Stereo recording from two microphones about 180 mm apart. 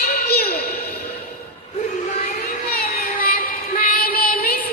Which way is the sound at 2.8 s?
55° left (ahead or behind).